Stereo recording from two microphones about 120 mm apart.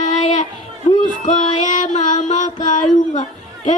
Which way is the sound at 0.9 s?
90° left.